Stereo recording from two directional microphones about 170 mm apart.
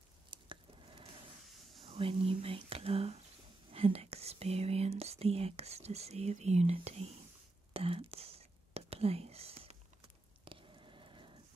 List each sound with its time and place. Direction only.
0.3 s chewing: 30° right (ahead or behind)
1.9 s whispering: 30° right (ahead or behind)
10.4 s a sound: 30° right (ahead or behind)